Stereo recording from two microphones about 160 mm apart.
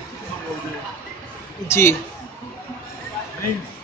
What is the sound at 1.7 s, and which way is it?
Speech, 15° left (ahead or behind).